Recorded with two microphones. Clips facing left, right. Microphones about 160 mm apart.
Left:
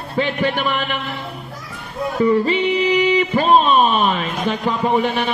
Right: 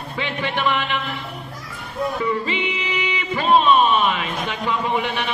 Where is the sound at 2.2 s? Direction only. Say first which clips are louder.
Left 13 dB; 40° left (ahead or behind).